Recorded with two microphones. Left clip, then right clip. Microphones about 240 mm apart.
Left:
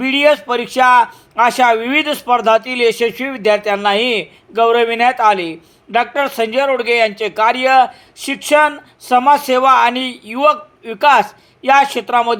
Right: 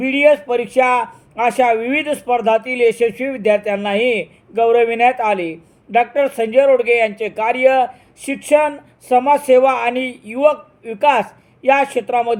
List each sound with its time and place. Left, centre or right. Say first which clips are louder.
0.0 s a man's voice: left 1 dB; centre